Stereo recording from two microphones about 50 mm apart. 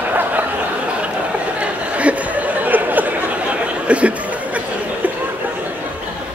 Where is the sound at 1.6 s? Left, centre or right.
Right.